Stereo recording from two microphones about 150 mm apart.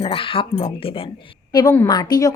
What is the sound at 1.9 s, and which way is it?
Speech, 25° left (ahead or behind).